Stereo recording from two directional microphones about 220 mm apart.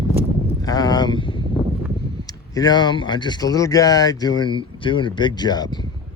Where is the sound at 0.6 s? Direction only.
15° left (ahead or behind).